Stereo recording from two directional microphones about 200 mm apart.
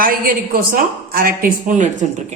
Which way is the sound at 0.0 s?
45° right (ahead or behind).